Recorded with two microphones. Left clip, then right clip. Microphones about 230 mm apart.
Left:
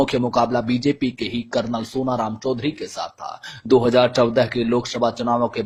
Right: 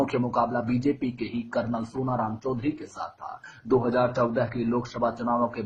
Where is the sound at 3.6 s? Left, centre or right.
Left.